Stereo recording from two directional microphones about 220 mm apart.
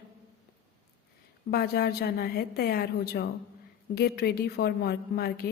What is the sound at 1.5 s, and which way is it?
A woman's voice, 45° left (ahead or behind).